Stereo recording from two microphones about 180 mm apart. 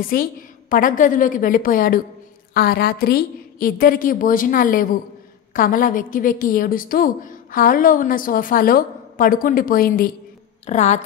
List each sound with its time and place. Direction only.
0.0 s a woman's voice: 50° left (ahead or behind)
10.7 s speech: 40° left (ahead or behind)